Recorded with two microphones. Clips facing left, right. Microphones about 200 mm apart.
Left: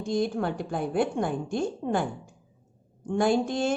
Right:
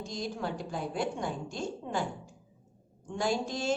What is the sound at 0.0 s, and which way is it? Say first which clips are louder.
A woman's voice: left 9 dB; 55° left (ahead or behind).